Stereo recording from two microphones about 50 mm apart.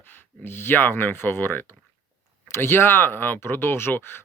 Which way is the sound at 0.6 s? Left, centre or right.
Left.